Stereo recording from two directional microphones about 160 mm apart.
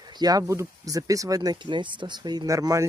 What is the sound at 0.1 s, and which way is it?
Speech, 25° right (ahead or behind).